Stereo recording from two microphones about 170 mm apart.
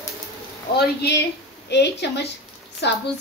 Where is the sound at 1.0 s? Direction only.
75° left (ahead or behind).